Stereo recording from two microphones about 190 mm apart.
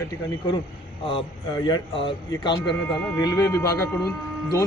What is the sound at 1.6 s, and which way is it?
Speech, 25° left (ahead or behind).